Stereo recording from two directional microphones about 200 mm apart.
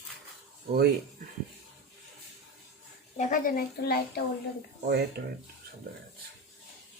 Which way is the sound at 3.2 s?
40° left (ahead or behind).